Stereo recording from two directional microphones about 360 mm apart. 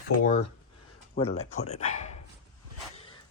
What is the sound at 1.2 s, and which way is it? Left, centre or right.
Speech, centre.